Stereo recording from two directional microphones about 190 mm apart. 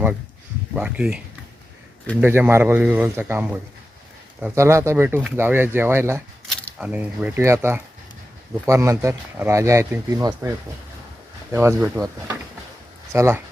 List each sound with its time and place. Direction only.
0.8 s speech: 5° right (ahead or behind)
2.2 s speech: 10° right (ahead or behind)
11.5 s speech: 10° right (ahead or behind)
13.1 s speech: 15° right (ahead or behind)